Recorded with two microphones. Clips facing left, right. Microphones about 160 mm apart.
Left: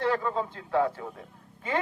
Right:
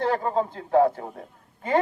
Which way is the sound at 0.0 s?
45° right (ahead or behind).